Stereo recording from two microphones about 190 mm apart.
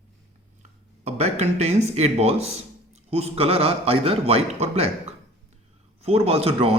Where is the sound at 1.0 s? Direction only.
35° right (ahead or behind).